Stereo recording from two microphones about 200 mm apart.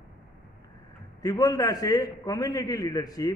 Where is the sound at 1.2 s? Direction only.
20° left (ahead or behind).